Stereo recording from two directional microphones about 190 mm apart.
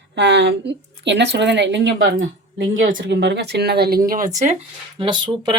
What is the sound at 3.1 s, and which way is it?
Speech, 65° right (ahead or behind).